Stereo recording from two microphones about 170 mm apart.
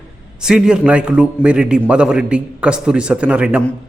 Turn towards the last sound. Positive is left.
turn(degrees=-5)  # may be behind; listen again after turning